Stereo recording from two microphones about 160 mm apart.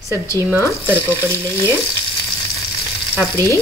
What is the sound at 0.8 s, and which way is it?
Speech, 15° right (ahead or behind).